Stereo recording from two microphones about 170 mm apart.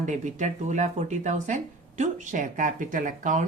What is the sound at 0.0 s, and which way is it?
Speech, 45° right (ahead or behind).